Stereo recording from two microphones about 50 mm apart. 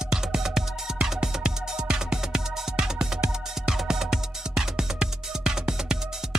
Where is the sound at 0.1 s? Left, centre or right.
Centre.